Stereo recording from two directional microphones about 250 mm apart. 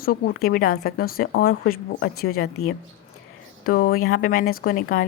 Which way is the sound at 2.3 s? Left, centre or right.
Left.